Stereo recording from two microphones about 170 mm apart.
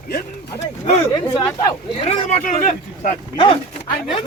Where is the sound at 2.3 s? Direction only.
45° left (ahead or behind).